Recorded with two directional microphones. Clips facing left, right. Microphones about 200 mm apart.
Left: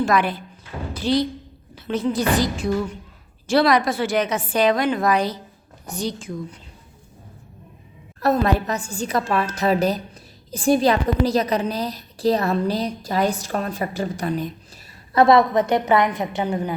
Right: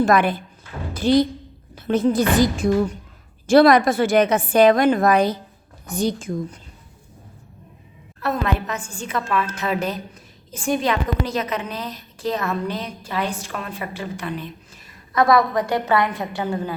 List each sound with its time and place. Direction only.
0.0 s a woman's voice: 50° right (ahead or behind)
8.2 s a woman's voice: 35° left (ahead or behind); by 16.7 s 20° left (ahead or behind)